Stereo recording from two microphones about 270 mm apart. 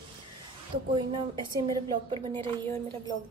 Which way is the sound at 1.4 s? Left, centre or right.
Centre.